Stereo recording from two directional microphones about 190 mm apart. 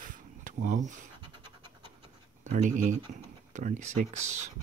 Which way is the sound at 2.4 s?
40° right (ahead or behind).